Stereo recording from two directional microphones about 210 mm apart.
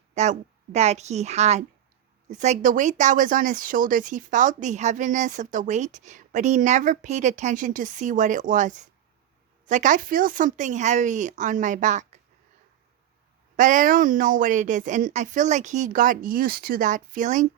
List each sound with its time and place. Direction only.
0.1 s a woman's voice: 35° right (ahead or behind)
13.6 s speech: 40° right (ahead or behind)